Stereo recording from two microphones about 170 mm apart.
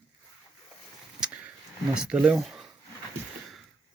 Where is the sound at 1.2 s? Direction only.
5° right (ahead or behind).